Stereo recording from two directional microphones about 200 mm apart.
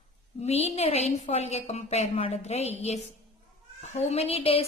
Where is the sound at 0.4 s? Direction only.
35° left (ahead or behind).